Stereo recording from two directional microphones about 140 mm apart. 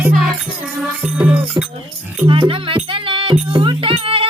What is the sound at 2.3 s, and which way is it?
Music, 40° right (ahead or behind).